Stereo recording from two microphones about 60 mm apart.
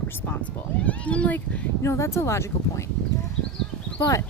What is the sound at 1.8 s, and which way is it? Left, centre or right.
Speech, left.